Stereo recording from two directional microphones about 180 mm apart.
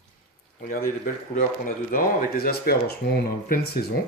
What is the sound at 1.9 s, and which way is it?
Speech, 55° left (ahead or behind).